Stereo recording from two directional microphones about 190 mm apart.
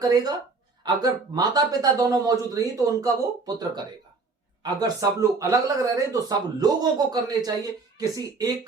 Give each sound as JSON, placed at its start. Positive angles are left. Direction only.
{"t": 0.0, "sound": "speech", "side_deg": -20}